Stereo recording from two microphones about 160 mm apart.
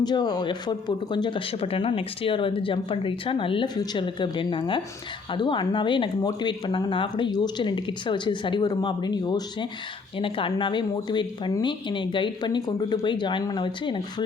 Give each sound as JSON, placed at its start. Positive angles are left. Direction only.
{"t": 0.0, "sound": "speech", "side_deg": 25}